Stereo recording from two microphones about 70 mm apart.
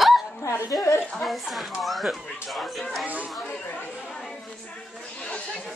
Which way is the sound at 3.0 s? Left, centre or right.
Right.